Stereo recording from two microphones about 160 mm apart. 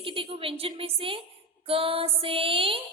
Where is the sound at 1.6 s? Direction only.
35° right (ahead or behind).